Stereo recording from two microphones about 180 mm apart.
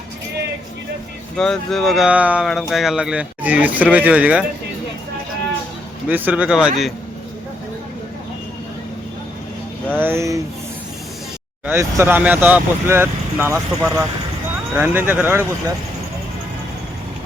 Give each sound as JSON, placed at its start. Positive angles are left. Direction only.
{"t": 1.4, "sound": "speech", "side_deg": 5}
{"t": 6.1, "sound": "speech", "side_deg": -10}
{"t": 10.0, "sound": "speech", "side_deg": -15}
{"t": 11.6, "sound": "speech", "side_deg": -15}